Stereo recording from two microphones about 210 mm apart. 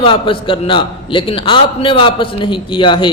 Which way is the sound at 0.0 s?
25° left (ahead or behind).